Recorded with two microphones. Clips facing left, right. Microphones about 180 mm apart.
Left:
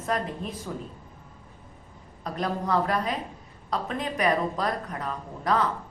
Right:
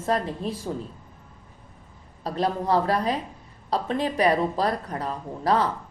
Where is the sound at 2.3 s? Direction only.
30° right (ahead or behind).